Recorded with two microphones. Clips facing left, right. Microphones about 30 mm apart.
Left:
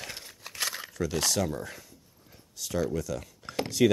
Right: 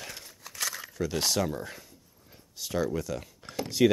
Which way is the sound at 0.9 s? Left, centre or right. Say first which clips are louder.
Even; centre.